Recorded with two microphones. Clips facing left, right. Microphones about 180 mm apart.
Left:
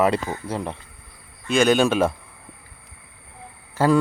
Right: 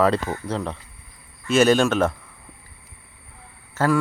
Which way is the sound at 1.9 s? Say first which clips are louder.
Left 1 dB; 10° left (ahead or behind).